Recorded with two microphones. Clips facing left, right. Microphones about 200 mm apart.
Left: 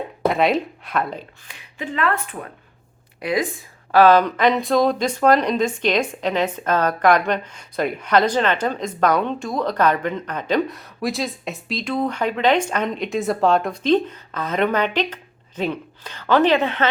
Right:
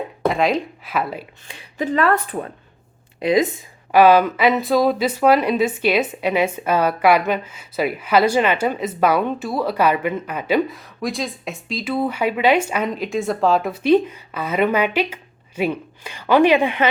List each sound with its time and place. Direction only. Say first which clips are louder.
0.3 s speech: even; centre (ahead or behind)
1.8 s speech: right 5 dB; 40° right (ahead or behind)
3.2 s speech: right 5 dB; 20° right (ahead or behind)
3.9 s speech: right 1 dB; 10° right (ahead or behind)